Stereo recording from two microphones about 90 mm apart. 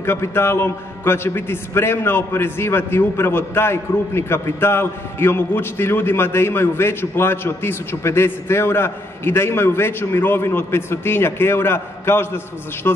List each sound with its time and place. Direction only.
0.0 s a man's voice: 30° left (ahead or behind)